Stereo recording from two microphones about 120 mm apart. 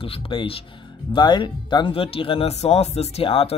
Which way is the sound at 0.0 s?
50° left (ahead or behind).